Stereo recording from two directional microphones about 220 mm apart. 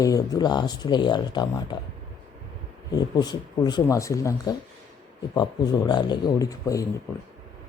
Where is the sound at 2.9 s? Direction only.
20° left (ahead or behind).